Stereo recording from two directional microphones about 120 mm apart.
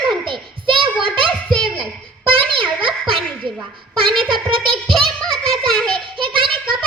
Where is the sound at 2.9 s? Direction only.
45° right (ahead or behind).